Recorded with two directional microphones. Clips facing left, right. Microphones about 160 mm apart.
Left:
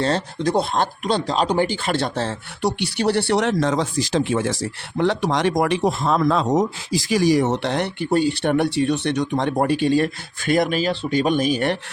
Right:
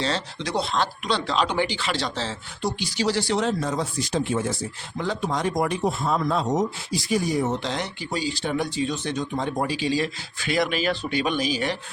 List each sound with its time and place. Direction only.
0.0 s speech: 50° left (ahead or behind)